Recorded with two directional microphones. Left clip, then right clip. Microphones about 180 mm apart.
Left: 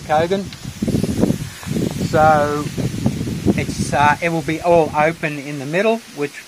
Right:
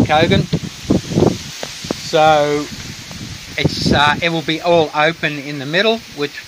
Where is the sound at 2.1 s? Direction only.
15° right (ahead or behind).